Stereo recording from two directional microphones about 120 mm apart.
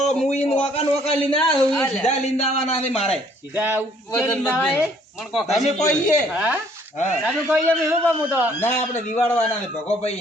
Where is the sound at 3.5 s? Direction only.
15° right (ahead or behind).